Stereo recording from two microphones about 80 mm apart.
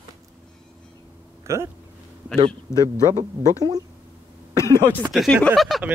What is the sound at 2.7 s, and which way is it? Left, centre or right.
Speech, left.